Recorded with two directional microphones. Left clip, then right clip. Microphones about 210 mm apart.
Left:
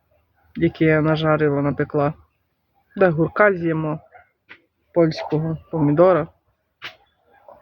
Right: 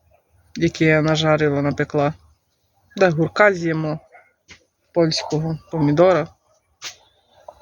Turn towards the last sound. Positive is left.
turn(degrees=-5)  # may be behind; listen again after turning